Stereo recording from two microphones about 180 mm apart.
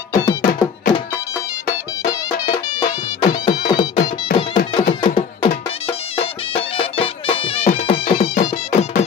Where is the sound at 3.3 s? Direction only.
20° left (ahead or behind).